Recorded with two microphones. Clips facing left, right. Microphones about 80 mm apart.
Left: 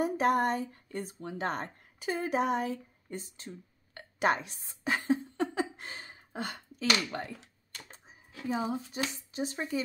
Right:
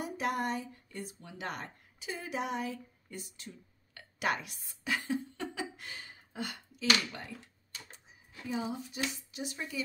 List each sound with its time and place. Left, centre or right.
0.0 s speech: left
8.5 s speech: left